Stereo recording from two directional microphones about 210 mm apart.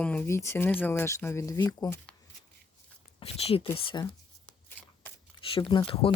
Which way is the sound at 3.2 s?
30° left (ahead or behind).